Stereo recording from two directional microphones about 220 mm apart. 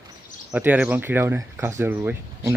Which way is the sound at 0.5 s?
5° right (ahead or behind).